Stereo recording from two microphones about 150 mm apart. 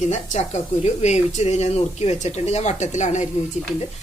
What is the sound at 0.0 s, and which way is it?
A woman's voice, 50° left (ahead or behind).